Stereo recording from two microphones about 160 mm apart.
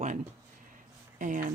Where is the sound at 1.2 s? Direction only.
55° right (ahead or behind).